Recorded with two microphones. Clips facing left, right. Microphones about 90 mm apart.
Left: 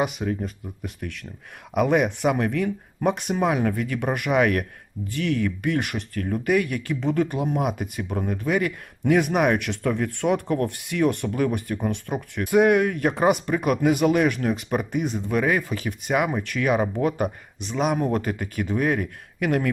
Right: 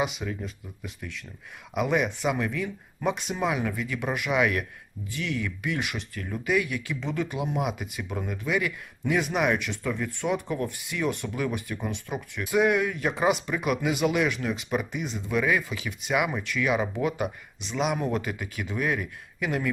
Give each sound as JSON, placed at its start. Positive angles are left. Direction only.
{"t": 0.0, "sound": "speech", "side_deg": 45}